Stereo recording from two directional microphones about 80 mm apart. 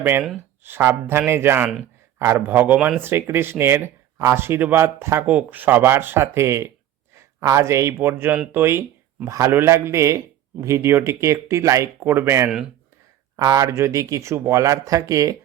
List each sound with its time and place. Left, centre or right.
0.6 s speech: right
5.2 s a man's voice: centre; by 12.5 s right
12.5 s speech: centre
13.3 s speech: right